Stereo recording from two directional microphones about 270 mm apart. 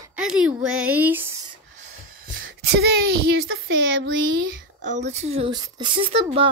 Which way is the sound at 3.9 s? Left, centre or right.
Right.